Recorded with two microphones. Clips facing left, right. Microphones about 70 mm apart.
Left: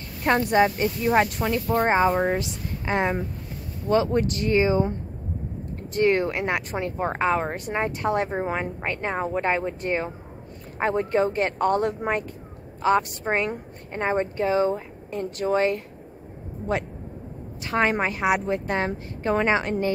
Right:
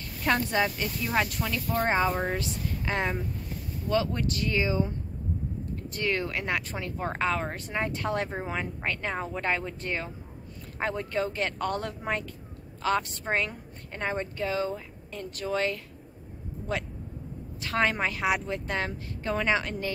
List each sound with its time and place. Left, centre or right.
0.2 s speech: left
1.9 s speech: left
5.9 s speech: left
17.6 s speech: left